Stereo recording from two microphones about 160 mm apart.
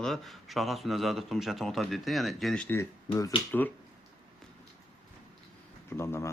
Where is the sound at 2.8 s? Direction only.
15° left (ahead or behind).